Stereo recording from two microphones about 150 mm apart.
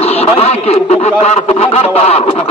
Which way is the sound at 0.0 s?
40° left (ahead or behind).